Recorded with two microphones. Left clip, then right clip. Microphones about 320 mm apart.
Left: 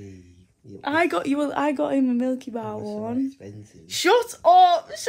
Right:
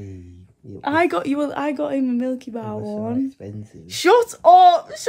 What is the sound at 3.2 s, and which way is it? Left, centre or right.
Speech, right.